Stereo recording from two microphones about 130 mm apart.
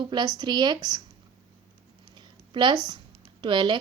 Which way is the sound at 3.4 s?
35° right (ahead or behind).